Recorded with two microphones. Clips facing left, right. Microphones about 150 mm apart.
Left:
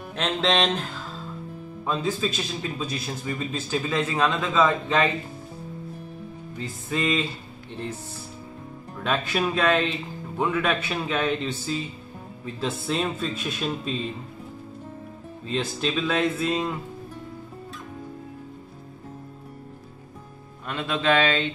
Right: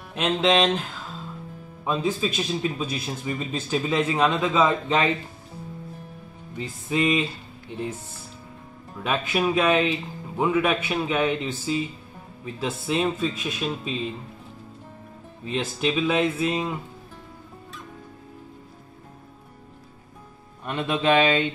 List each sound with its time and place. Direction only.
0.1 s speech: 10° right (ahead or behind)
1.9 s speech: 15° right (ahead or behind)
6.9 s speech: 15° right (ahead or behind)
8.9 s speech: 10° right (ahead or behind)
15.4 s speech: 10° right (ahead or behind)
20.6 s speech: 20° right (ahead or behind)